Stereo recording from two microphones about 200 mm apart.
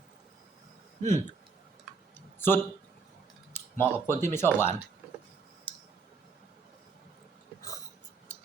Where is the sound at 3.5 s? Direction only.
10° left (ahead or behind).